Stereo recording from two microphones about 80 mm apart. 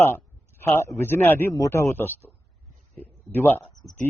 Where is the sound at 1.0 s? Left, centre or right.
Left.